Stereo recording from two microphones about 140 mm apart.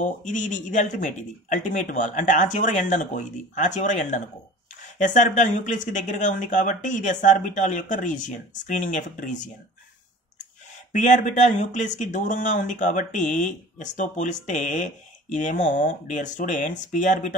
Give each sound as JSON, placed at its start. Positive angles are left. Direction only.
{"t": 0.0, "sound": "speech", "side_deg": 65}
{"t": 10.9, "sound": "speech", "side_deg": 65}